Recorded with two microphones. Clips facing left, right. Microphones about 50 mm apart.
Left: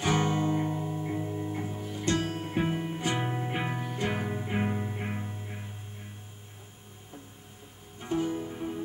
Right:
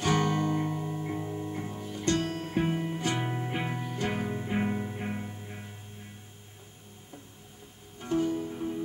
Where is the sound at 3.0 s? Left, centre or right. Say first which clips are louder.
Even; centre.